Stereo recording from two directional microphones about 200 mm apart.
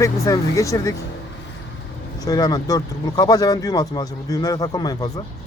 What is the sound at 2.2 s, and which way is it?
Speech, 20° left (ahead or behind).